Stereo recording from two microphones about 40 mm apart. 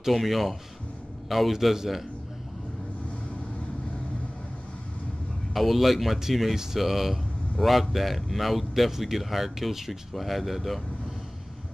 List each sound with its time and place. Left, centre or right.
0.0 s a man's voice: centre
5.5 s a man's voice: centre